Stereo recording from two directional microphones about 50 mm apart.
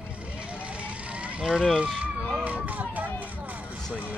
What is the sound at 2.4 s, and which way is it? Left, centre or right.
Speech, right.